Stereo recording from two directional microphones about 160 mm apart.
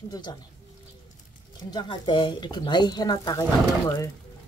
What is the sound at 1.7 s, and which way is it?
Speech, 30° left (ahead or behind).